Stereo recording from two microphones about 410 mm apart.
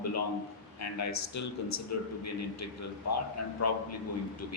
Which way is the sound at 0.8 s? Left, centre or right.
Left.